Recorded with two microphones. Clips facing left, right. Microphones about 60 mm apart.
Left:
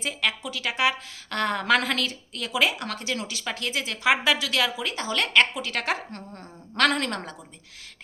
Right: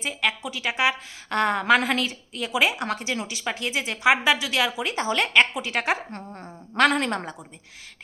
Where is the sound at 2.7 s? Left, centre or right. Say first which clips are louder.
Right 3 dB; centre.